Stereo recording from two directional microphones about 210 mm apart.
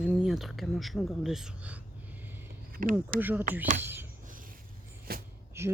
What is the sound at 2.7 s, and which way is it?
Speech, 40° right (ahead or behind).